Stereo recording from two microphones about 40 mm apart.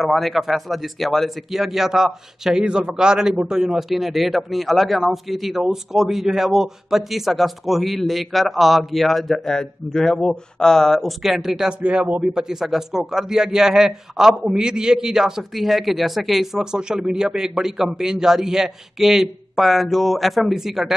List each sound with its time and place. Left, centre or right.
0.0 s a man's voice: centre
1.5 s a man's voice: centre
2.6 s a man's voice: right
3.7 s a man's voice: centre
11.2 s a man's voice: centre
16.7 s a man's voice: centre